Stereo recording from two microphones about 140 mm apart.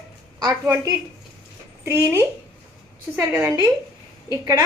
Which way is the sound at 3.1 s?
20° right (ahead or behind).